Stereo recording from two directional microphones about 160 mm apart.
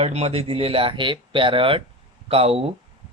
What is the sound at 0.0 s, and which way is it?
Speech, 40° right (ahead or behind).